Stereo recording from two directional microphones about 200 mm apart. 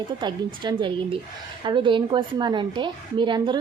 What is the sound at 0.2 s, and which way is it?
A woman's voice, 20° right (ahead or behind).